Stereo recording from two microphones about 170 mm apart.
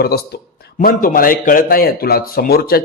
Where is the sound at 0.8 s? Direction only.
60° left (ahead or behind).